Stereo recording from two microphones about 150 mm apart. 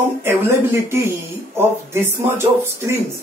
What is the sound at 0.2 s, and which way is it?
Speech, 15° right (ahead or behind).